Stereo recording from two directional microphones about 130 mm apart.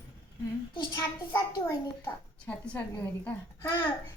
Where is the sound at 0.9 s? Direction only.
15° left (ahead or behind).